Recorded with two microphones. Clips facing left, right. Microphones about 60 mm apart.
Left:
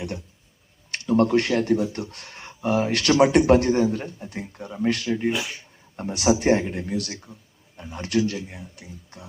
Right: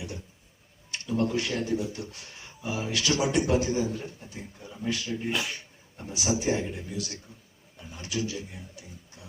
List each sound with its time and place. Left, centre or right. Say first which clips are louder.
0.9 s speech: left 8 dB; left
5.3 s speech: left 3 dB; centre
6.0 s speech: left 8 dB; left